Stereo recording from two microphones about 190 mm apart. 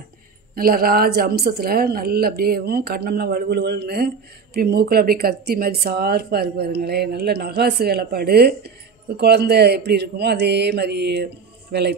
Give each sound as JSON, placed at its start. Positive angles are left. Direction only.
{"t": 0.6, "sound": "speech", "side_deg": -50}